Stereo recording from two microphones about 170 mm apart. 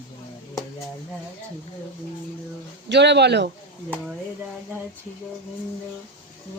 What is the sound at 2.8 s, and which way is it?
Speech, 90° right.